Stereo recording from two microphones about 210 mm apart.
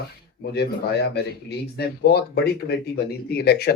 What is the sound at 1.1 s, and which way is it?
Speech, 50° left (ahead or behind).